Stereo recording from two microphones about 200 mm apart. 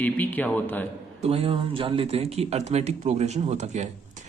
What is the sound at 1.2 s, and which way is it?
Speech, 30° right (ahead or behind).